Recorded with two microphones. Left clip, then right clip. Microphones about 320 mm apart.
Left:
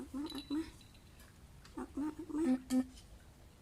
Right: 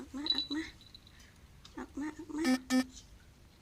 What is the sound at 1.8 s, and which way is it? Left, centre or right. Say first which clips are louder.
Speech: even; centre.